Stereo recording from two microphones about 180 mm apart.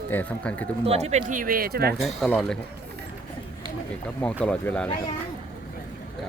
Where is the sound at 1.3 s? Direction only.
50° right (ahead or behind).